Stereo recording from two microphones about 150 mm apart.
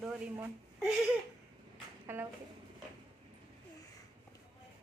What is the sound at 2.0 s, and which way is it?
Speech, 15° right (ahead or behind).